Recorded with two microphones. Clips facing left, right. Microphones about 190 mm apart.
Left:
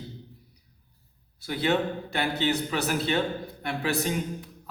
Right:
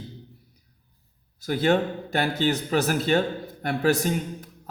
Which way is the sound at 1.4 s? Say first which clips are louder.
Right 4 dB; 45° right (ahead or behind).